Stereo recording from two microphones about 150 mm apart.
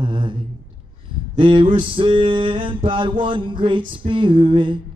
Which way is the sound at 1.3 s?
35° right (ahead or behind).